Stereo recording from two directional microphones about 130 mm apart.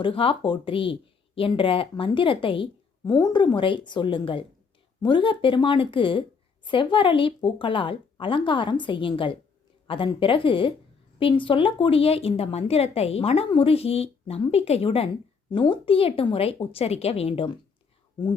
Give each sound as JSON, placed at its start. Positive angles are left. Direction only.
{"t": 0.0, "sound": "speech", "side_deg": 45}
{"t": 3.0, "sound": "a woman's voice", "side_deg": 30}
{"t": 15.4, "sound": "speech", "side_deg": 35}